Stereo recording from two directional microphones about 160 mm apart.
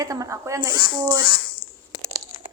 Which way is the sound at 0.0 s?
20° right (ahead or behind).